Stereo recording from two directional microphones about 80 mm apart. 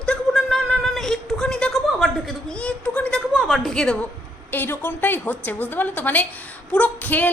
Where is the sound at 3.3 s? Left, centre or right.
Centre.